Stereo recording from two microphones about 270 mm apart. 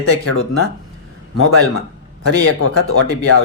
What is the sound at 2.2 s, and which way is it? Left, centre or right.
Speech, left.